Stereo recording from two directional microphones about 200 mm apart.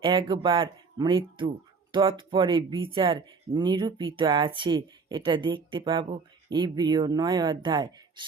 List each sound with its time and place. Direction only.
0.0 s speech: 20° right (ahead or behind)